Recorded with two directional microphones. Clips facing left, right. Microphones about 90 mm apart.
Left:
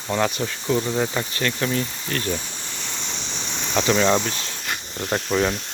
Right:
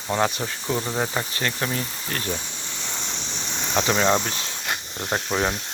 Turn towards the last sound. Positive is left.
turn(degrees=-20)  # may be behind; listen again after turning